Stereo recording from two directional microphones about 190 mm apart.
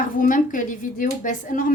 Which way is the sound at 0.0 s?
45° left (ahead or behind).